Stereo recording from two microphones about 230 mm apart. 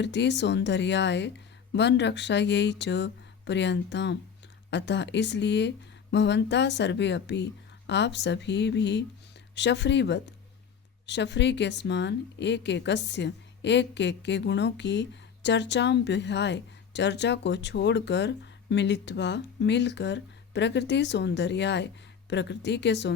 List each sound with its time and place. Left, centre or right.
0.0 s a woman's voice: left